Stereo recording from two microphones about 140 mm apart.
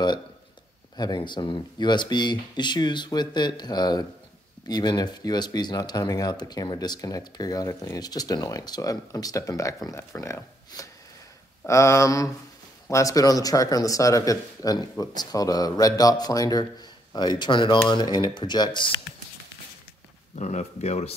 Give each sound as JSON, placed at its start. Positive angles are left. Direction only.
{"t": 0.9, "sound": "speech", "side_deg": 30}
{"t": 20.3, "sound": "speech", "side_deg": 55}